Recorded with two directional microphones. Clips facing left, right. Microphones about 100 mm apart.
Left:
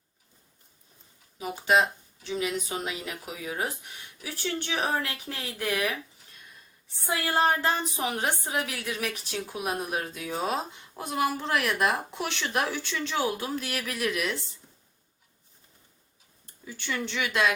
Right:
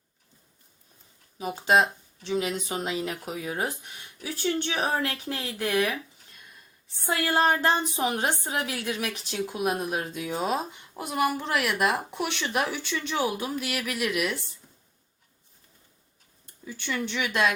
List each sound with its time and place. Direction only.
1.4 s a woman's voice: 25° right (ahead or behind)
7.3 s a woman's voice: 20° right (ahead or behind)
9.0 s speech: 15° right (ahead or behind)
16.6 s speech: 15° right (ahead or behind)